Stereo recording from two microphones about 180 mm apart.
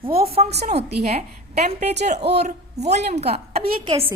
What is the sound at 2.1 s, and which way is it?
Speech, 65° right (ahead or behind).